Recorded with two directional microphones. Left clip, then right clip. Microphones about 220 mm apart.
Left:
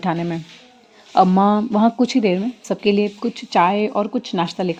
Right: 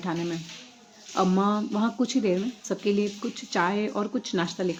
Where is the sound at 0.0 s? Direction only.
40° left (ahead or behind).